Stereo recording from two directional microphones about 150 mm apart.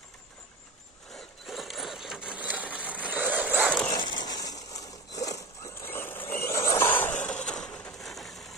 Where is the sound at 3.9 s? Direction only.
30° left (ahead or behind).